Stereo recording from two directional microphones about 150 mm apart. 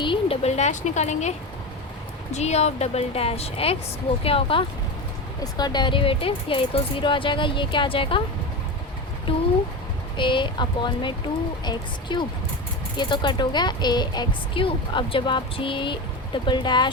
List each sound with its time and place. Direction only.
0.0 s a sound: 35° left (ahead or behind)
0.4 s a woman's voice: 50° left (ahead or behind)
2.3 s a woman's voice: 45° left (ahead or behind)
5.4 s speech: 25° left (ahead or behind)
9.3 s a woman's voice: 35° left (ahead or behind)